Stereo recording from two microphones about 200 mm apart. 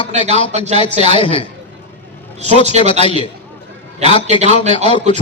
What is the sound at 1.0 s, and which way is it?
Speech, 25° left (ahead or behind).